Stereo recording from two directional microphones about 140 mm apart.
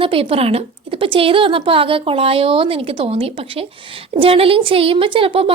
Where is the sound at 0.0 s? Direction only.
40° right (ahead or behind).